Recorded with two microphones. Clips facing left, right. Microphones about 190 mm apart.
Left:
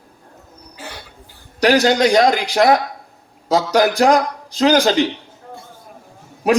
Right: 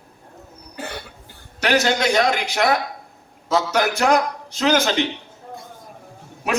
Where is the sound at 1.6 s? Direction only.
40° left (ahead or behind).